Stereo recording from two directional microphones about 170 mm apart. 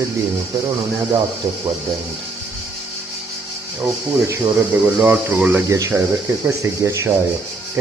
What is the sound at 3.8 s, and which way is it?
Speech, 15° right (ahead or behind).